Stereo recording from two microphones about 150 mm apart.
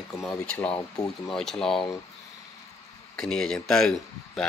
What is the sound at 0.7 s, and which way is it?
Speech, 25° left (ahead or behind).